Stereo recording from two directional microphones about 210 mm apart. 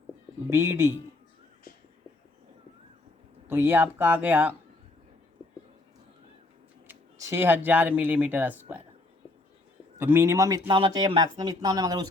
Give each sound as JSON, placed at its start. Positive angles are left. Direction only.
{"t": 0.5, "sound": "speech", "side_deg": -10}
{"t": 3.4, "sound": "speech", "side_deg": -10}
{"t": 6.8, "sound": "speech", "side_deg": -10}
{"t": 10.0, "sound": "speech", "side_deg": -10}